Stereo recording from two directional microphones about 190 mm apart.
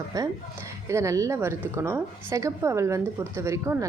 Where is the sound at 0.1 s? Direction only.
20° right (ahead or behind).